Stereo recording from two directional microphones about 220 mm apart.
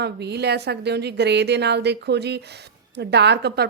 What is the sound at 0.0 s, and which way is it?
A woman's voice, 50° right (ahead or behind).